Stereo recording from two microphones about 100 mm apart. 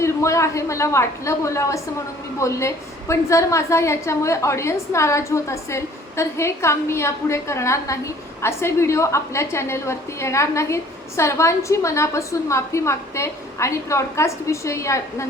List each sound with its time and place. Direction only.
0.0 s a woman's voice: 30° left (ahead or behind)